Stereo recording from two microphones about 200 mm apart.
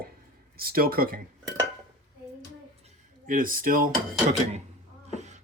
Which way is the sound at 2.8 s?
40° right (ahead or behind).